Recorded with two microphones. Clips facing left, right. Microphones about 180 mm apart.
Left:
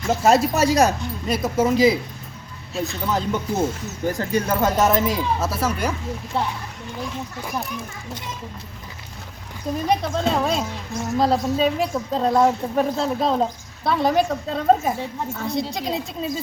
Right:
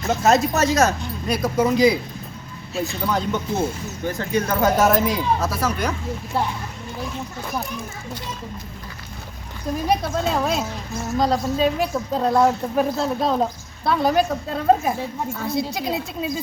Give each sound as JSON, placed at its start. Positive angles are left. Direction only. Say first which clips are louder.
{"t": 0.1, "sound": "a woman's voice", "louder": "left 1 dB", "side_deg": 10}
{"t": 4.0, "sound": "speech", "louder": "left 1 dB", "side_deg": 35}
{"t": 4.4, "sound": "a woman's voice", "louder": "right 2 dB", "side_deg": 0}
{"t": 9.8, "sound": "a woman's voice", "louder": "even", "side_deg": -5}